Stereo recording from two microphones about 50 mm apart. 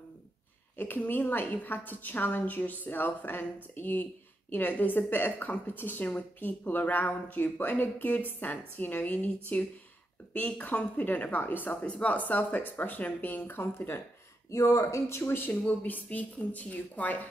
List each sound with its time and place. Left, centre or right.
0.7 s a woman's voice: left
11.8 s a woman's voice: left
13.6 s speech: left
14.5 s speech: left
15.5 s a woman's voice: left